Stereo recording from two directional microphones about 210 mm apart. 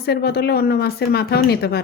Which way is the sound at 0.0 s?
50° left (ahead or behind).